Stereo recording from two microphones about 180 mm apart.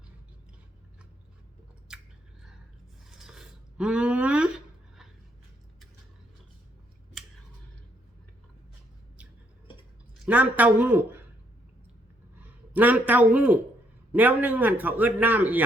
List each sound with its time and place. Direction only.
1.9 s chewing: 5° right (ahead or behind)
3.1 s a sound: centre (ahead or behind)
10.2 s a man's voice: 10° right (ahead or behind)
12.4 s a man's voice: 10° right (ahead or behind)